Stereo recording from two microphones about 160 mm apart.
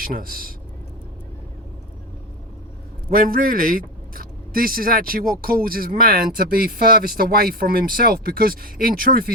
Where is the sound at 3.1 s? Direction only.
65° right (ahead or behind).